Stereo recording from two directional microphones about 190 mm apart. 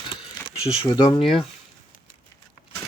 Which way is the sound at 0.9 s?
20° left (ahead or behind).